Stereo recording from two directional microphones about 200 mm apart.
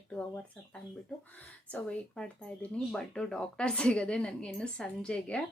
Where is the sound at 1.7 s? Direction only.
5° left (ahead or behind).